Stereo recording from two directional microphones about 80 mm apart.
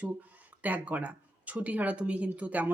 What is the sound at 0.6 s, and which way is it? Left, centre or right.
Speech, centre.